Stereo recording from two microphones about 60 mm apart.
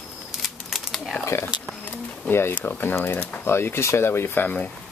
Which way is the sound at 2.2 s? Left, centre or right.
Left.